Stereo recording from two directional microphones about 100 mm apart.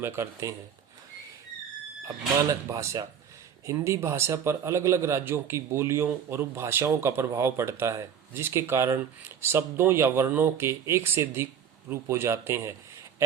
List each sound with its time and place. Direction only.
0.0 s speech: 25° right (ahead or behind)
2.0 s speech: 35° right (ahead or behind)